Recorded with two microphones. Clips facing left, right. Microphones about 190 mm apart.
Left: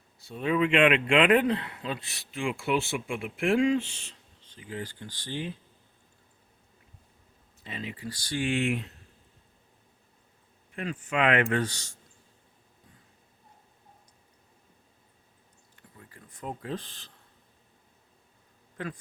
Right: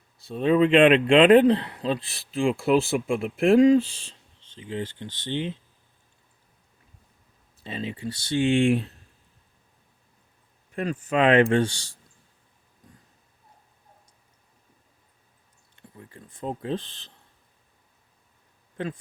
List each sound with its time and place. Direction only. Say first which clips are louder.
0.2 s speech: right 6 dB; 30° right (ahead or behind)
7.6 s speech: right 6 dB; 30° right (ahead or behind)
10.8 s speech: right 5 dB; 40° right (ahead or behind)
15.7 s a sound: right 6 dB; 25° right (ahead or behind)
18.8 s speech: right 5 dB; 25° right (ahead or behind)